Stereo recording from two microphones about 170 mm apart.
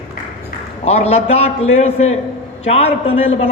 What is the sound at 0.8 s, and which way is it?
A man's voice, 40° left (ahead or behind).